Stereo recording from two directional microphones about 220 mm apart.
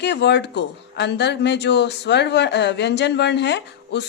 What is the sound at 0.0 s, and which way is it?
Speech, 50° left (ahead or behind).